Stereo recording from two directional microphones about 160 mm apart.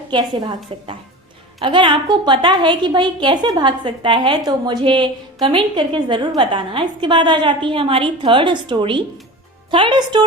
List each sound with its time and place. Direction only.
0.1 s a woman's voice: 30° right (ahead or behind)